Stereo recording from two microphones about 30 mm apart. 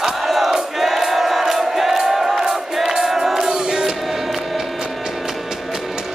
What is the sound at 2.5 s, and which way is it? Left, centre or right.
Music, centre.